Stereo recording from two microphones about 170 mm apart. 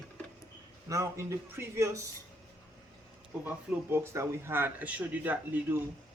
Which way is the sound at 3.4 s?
15° right (ahead or behind).